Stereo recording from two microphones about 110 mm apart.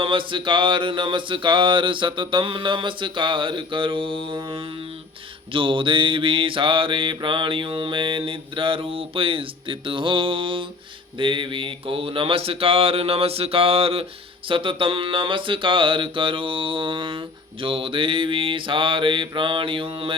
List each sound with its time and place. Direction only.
0.0 s mantra: 50° right (ahead or behind)